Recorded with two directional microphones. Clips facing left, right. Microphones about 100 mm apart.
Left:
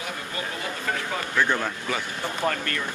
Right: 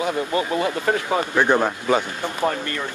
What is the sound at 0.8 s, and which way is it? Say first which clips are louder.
Speech: right 8 dB; 40° right (ahead or behind).